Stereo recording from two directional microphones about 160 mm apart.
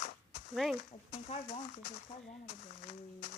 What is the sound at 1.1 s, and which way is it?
Speech, 40° left (ahead or behind).